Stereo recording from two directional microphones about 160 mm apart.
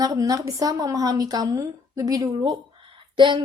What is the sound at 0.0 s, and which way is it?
A woman's voice, 25° right (ahead or behind).